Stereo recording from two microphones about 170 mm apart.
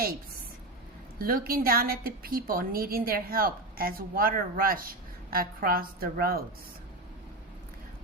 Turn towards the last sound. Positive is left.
turn(degrees=-60)  # may be behind; listen again after turning